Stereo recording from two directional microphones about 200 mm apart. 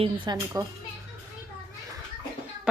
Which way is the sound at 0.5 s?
15° right (ahead or behind).